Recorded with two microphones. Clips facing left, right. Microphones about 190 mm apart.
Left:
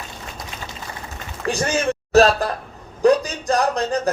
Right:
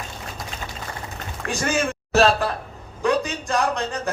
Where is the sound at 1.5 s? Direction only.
35° left (ahead or behind).